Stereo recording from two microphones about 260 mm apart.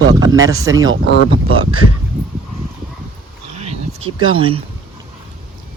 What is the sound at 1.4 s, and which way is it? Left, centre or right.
Speech, right.